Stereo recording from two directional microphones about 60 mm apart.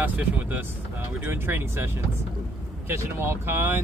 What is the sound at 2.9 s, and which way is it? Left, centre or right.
Speech, right.